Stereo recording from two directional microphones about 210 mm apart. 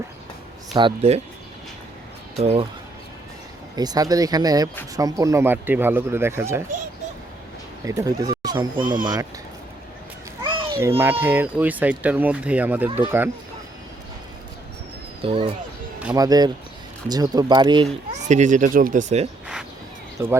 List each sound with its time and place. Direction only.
0.8 s speech: 25° right (ahead or behind)
2.4 s speech: 30° right (ahead or behind)
3.8 s speech: 20° right (ahead or behind)
7.9 s speech: 15° right (ahead or behind)
8.7 s speech: 40° right (ahead or behind)
10.4 s babbling: 20° right (ahead or behind)
10.8 s speech: 10° right (ahead or behind)
15.2 s speech: 25° right (ahead or behind)
18.1 s speech: 35° right (ahead or behind)
20.2 s speech: 15° right (ahead or behind)